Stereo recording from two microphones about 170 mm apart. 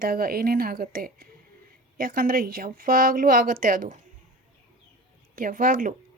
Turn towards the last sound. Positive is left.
turn(degrees=-55)  # may be behind; listen again after turning